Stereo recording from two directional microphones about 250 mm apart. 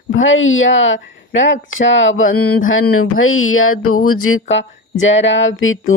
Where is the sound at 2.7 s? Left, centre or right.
Left.